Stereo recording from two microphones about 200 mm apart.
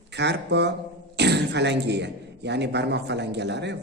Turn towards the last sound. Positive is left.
turn(degrees=-60)  # may be behind; listen again after turning